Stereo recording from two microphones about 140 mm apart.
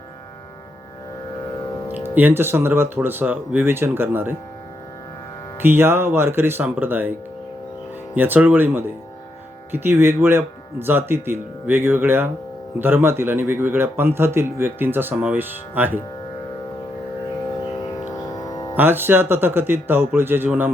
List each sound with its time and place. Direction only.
1.9 s speech: 15° right (ahead or behind)
5.6 s speech: 15° right (ahead or behind)
18.3 s music: 25° left (ahead or behind)
18.8 s speech: 15° right (ahead or behind)